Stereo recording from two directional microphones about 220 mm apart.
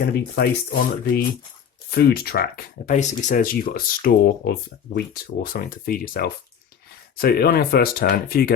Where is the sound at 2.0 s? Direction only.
45° left (ahead or behind).